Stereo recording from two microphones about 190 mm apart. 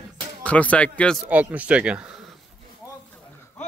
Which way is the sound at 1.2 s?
5° right (ahead or behind).